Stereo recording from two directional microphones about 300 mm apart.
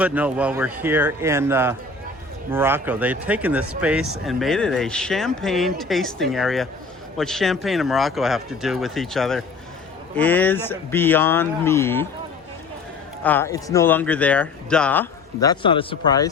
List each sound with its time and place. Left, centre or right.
0.0 s speech: centre
13.2 s speech: centre